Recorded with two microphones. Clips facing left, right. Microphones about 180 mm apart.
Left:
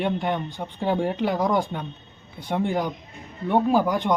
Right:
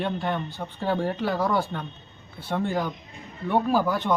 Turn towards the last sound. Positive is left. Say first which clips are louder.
# left 2 dB
turn(degrees=15)  # may be behind; listen again after turning